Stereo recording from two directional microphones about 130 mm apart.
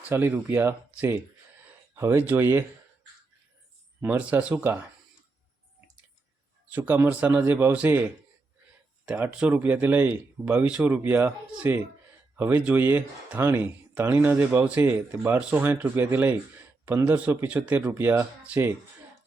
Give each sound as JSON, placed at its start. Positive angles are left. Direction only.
{"t": 0.1, "sound": "speech", "side_deg": -20}
{"t": 4.0, "sound": "speech", "side_deg": -10}
{"t": 6.7, "sound": "speech", "side_deg": -15}